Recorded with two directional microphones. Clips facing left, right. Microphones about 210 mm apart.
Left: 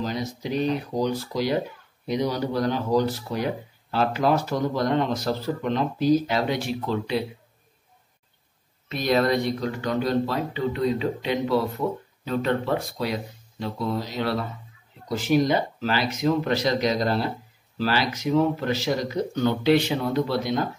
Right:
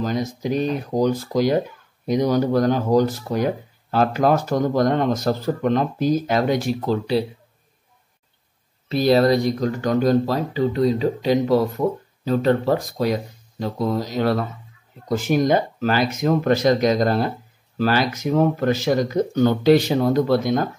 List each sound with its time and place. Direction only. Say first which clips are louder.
0.0 s speech: right 5 dB; 45° right (ahead or behind)
8.8 s speech: right 6 dB; 35° right (ahead or behind)